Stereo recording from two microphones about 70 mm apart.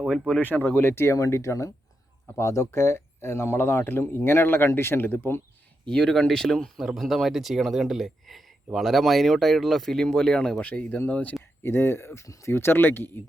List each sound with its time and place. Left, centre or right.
0.0 s speech: centre
0.4 s speech: left
0.8 s speech: left
5.9 s speech: centre
11.6 s speech: left